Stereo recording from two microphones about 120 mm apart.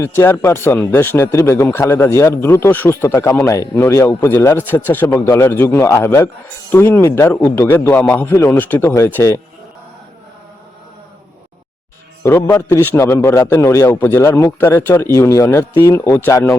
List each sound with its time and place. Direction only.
0.0 s a man's voice: 20° left (ahead or behind)
12.2 s a man's voice: 20° left (ahead or behind)